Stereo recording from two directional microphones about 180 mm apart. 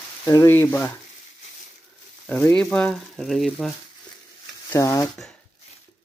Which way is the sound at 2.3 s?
10° left (ahead or behind).